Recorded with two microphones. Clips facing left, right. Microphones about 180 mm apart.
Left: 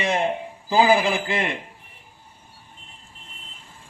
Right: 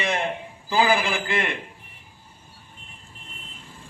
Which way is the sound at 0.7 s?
20° left (ahead or behind).